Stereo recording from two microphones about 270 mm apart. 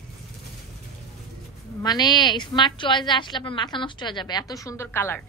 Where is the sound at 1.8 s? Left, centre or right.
Centre.